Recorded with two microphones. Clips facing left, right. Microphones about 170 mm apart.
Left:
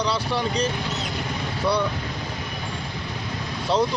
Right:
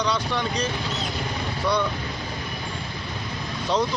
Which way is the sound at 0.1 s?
5° left (ahead or behind).